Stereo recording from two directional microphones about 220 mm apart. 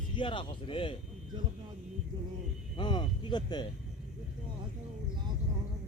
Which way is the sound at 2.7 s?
20° left (ahead or behind).